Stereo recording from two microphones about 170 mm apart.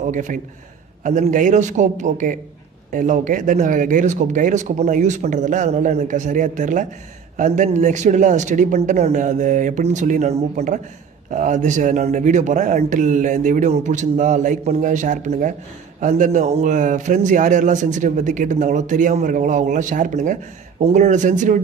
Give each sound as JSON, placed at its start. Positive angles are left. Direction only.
{"t": 0.0, "sound": "speech", "side_deg": -50}